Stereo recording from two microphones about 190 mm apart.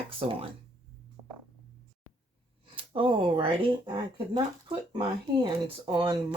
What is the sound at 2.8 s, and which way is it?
Speech, 25° right (ahead or behind).